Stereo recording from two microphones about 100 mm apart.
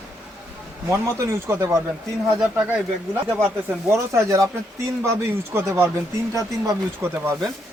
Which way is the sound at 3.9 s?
30° right (ahead or behind).